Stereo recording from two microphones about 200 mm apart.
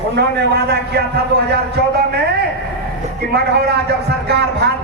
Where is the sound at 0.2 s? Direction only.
55° right (ahead or behind).